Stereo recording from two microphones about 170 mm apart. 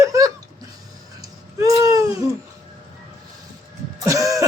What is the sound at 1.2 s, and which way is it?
Babbling, 20° right (ahead or behind).